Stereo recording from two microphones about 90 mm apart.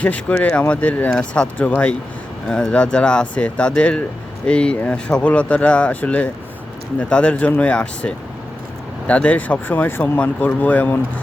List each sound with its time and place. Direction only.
0.0 s speech: 15° left (ahead or behind)